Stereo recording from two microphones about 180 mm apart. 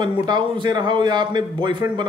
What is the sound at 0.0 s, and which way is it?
A man's voice, 25° right (ahead or behind).